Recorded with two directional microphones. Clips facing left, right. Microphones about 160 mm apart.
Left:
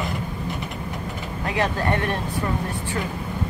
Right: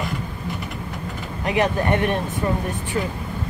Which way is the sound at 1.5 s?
20° right (ahead or behind).